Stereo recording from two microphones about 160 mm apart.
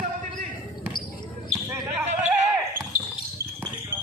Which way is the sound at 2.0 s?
45° right (ahead or behind).